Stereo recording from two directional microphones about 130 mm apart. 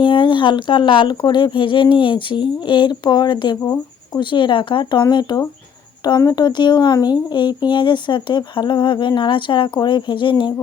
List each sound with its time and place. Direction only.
0.0 s speech: 40° left (ahead or behind)